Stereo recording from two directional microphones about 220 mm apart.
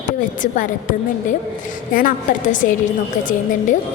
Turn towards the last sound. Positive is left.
turn(degrees=35)  # may be behind; listen again after turning